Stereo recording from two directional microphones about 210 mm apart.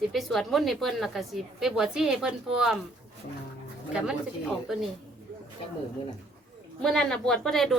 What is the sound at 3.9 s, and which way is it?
Speech, 5° right (ahead or behind).